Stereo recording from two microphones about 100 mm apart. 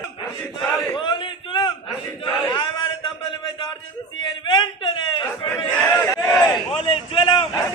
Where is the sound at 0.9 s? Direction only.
55° left (ahead or behind).